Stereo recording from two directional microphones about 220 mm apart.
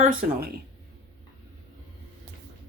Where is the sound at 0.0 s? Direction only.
40° right (ahead or behind).